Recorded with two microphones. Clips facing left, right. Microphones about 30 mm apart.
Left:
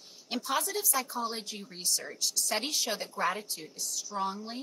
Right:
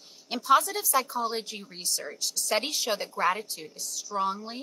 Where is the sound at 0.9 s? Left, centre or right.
Right.